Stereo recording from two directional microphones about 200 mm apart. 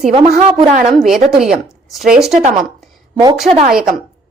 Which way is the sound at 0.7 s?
40° right (ahead or behind).